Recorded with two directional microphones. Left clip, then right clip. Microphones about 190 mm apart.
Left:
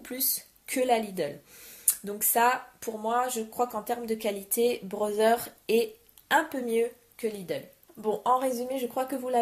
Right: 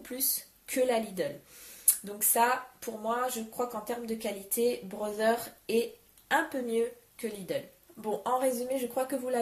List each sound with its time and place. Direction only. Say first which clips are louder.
0.0 s speech: left 2 dB; 40° left (ahead or behind)